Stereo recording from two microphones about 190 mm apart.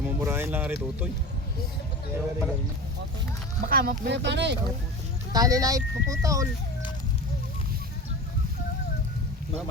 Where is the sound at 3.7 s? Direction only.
50° right (ahead or behind); by 4.5 s 65° right (ahead or behind).